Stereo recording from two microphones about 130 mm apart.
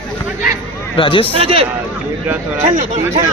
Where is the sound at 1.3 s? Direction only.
45° right (ahead or behind).